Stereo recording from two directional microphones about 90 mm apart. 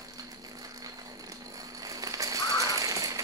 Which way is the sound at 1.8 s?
40° right (ahead or behind).